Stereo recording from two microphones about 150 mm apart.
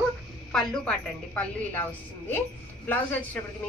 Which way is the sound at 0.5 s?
5° left (ahead or behind).